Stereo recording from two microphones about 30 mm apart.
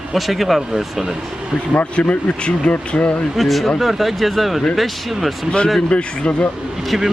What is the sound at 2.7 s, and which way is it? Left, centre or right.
Speech, left.